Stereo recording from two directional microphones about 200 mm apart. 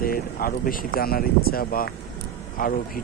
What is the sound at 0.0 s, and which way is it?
Speech, 45° left (ahead or behind).